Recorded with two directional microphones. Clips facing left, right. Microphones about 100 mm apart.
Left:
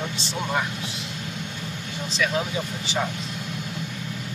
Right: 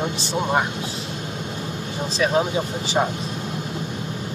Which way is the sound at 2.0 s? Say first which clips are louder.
Right 5 dB; 35° right (ahead or behind).